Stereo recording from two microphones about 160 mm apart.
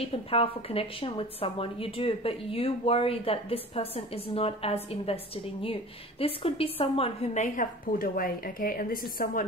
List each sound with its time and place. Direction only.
0.0 s a woman's voice: 35° left (ahead or behind)
7.5 s a woman's voice: 60° left (ahead or behind)